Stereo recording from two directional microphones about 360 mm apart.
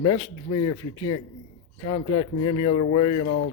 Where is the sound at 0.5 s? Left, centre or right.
Left.